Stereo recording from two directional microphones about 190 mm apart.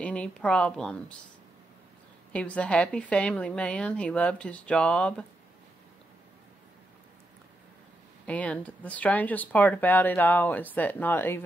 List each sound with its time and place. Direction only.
0.0 s speech: 5° left (ahead or behind)
2.3 s a woman's voice: 5° left (ahead or behind)
8.3 s speech: 5° left (ahead or behind)